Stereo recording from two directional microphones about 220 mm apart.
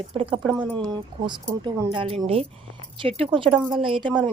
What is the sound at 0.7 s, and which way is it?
A woman's voice, 20° right (ahead or behind).